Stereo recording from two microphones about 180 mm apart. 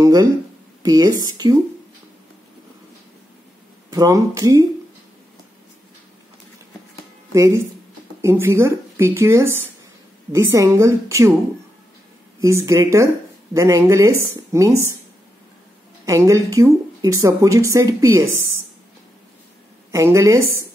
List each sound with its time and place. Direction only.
0.0 s speech: 20° right (ahead or behind)
3.9 s speech: 20° right (ahead or behind)
7.3 s speech: 15° right (ahead or behind)
12.4 s speech: 15° right (ahead or behind)
16.1 s speech: 15° right (ahead or behind)
19.9 s speech: 15° right (ahead or behind)